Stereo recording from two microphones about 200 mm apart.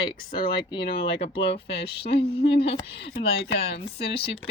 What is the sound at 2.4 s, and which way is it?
A woman's voice, 55° left (ahead or behind).